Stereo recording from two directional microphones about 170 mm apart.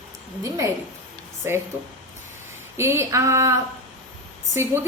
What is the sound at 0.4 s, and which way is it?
Speech, 20° right (ahead or behind).